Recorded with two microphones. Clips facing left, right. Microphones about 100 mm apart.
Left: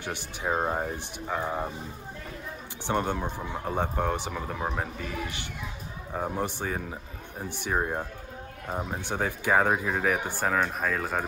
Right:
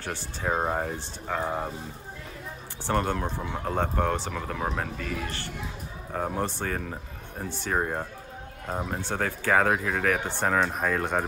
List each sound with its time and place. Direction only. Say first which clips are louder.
0.0 s speech: right 1 dB; 15° left (ahead or behind)
0.5 s speech: right 1 dB; centre (ahead or behind)
2.9 s speech: right 1 dB; 10° left (ahead or behind)
9.0 s speech: left 1 dB; 15° left (ahead or behind); by 11.2 s centre (ahead or behind)